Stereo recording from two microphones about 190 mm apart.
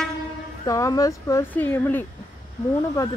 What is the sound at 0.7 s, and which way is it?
Speech, 15° left (ahead or behind).